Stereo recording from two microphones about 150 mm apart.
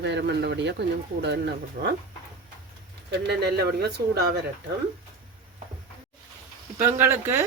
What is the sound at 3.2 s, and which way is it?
A man's voice, 90° right.